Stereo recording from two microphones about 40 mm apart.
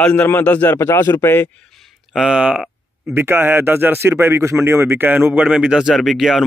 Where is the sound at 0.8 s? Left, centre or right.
Left.